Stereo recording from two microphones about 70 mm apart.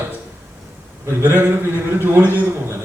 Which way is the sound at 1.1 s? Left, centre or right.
Right.